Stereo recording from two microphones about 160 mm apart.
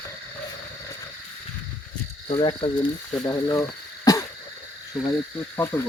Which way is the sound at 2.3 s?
30° left (ahead or behind).